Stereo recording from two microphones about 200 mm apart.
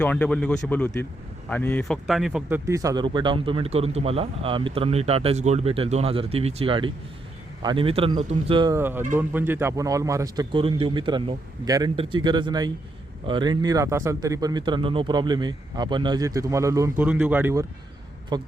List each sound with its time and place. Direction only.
0.0 s speech: 10° left (ahead or behind)
2.6 s speech: 15° right (ahead or behind)
8.8 s speech: 10° right (ahead or behind)